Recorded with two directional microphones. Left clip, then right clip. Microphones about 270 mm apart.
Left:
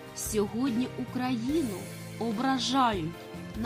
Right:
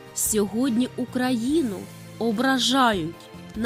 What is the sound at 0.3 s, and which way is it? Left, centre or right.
A woman's voice, centre.